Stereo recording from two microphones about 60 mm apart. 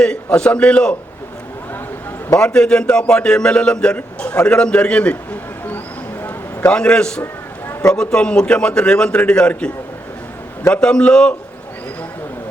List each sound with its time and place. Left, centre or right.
0.0 s a man's voice: centre
2.4 s a man's voice: centre
6.7 s a man's voice: centre